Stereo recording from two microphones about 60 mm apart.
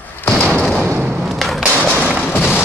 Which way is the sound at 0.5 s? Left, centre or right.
Centre.